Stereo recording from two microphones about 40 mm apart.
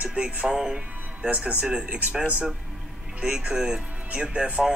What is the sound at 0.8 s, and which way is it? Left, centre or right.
Music, right.